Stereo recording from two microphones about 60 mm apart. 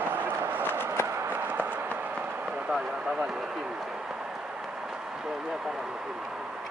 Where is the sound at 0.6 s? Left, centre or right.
Left.